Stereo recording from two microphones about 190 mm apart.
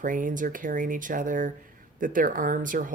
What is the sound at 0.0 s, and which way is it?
Speech, 45° right (ahead or behind).